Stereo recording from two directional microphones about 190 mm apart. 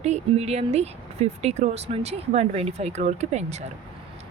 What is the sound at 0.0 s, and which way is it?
Speech, 35° right (ahead or behind).